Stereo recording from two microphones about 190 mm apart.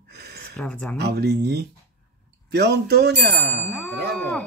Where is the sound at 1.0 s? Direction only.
60° right (ahead or behind).